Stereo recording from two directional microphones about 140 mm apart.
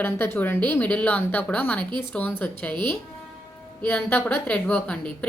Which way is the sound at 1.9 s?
30° right (ahead or behind).